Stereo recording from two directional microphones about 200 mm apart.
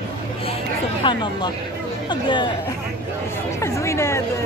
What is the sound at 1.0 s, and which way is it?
Speech, 25° left (ahead or behind).